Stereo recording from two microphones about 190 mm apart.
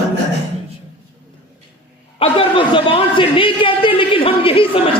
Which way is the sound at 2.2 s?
30° left (ahead or behind).